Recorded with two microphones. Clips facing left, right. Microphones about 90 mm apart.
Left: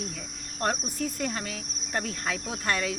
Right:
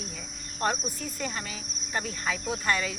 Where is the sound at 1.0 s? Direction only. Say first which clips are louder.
Left 4 dB; 65° left (ahead or behind).